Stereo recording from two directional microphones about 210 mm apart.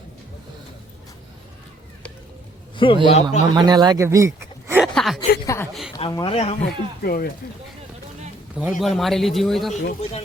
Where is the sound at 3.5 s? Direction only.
20° right (ahead or behind).